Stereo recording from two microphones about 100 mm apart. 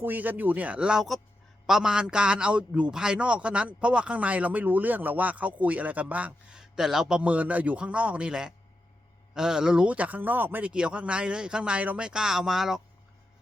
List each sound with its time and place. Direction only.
0.0 s a man's voice: 20° right (ahead or behind)
7.2 s a man's voice: 15° right (ahead or behind)